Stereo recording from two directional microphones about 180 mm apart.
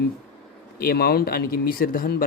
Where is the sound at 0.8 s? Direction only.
55° left (ahead or behind).